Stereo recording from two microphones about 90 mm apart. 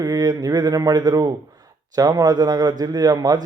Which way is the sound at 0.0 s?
45° right (ahead or behind).